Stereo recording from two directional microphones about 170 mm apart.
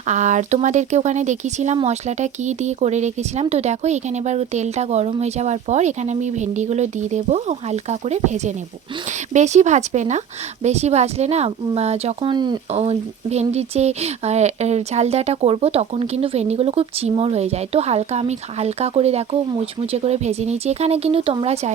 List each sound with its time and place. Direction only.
0.1 s speech: 45° right (ahead or behind)
12.3 s speech: 25° right (ahead or behind)
12.7 s speech: 40° right (ahead or behind)